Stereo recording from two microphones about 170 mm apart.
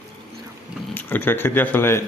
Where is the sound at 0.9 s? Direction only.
10° left (ahead or behind).